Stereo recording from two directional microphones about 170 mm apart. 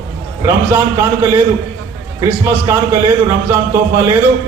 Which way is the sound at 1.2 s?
10° right (ahead or behind).